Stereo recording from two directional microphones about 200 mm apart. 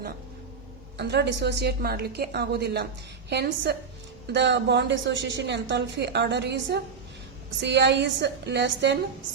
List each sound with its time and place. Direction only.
0.9 s a woman's voice: 55° right (ahead or behind)